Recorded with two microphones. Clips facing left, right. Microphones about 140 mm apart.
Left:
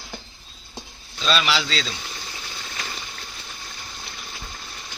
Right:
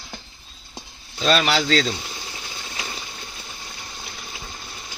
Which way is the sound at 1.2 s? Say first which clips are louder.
Right 3 dB; 50° right (ahead or behind).